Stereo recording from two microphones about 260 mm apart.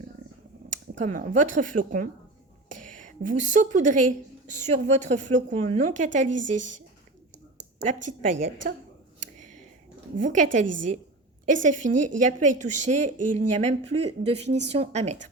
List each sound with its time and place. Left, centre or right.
0.7 s a woman's voice: right
6.2 s a woman's voice: right
8.4 s a woman's voice: right
10.2 s a woman's voice: right
13.1 s speech: right
13.6 s a woman's voice: right